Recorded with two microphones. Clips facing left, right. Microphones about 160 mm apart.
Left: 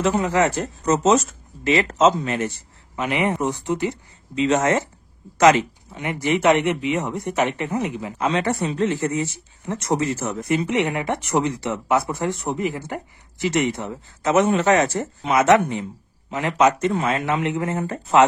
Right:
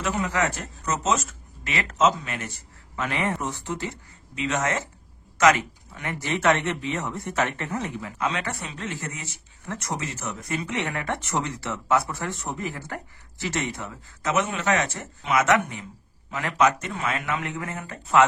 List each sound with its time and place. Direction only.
0.0 s speech: 30° left (ahead or behind)
3.0 s speech: 20° left (ahead or behind)
4.4 s speech: 30° left (ahead or behind)
8.2 s speech: 35° left (ahead or behind)
10.5 s speech: 20° left (ahead or behind)